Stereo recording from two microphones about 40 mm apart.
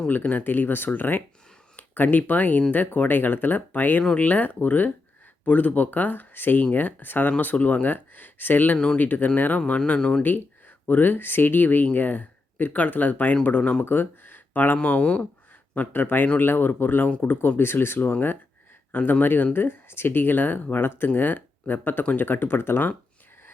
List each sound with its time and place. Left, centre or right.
0.1 s speech: left
6.6 s speech: left
10.0 s speech: left
10.2 s speech: left
13.6 s speech: left
13.8 s speech: left
14.8 s speech: left
15.9 s speech: left
17.6 s speech: left
18.9 s speech: left
19.5 s speech: left